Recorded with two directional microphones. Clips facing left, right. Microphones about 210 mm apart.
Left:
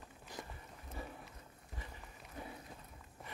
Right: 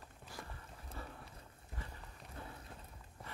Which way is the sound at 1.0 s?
15° left (ahead or behind).